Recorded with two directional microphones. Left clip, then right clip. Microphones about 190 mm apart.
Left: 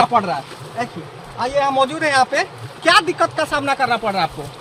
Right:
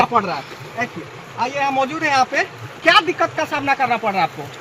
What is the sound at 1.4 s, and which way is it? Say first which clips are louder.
Speech: left 2 dB; 15° left (ahead or behind).